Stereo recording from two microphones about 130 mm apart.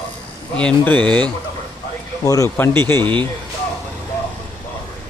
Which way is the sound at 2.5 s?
15° left (ahead or behind).